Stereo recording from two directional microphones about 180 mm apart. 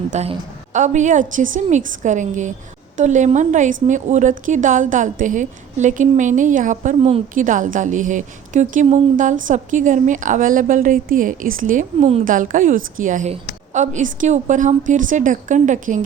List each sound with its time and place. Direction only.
0.1 s a woman's voice: 40° right (ahead or behind)
11.9 s a woman's voice: 35° right (ahead or behind)
12.2 s a woman's voice: 50° right (ahead or behind)